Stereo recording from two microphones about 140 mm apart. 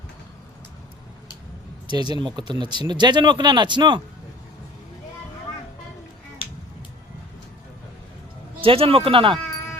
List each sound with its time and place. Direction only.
1.9 s speech: 30° right (ahead or behind)
8.6 s speech: 40° right (ahead or behind)